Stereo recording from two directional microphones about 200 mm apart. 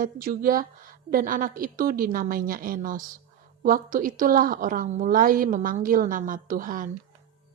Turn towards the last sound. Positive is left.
turn(degrees=-45)  # may be behind; listen again after turning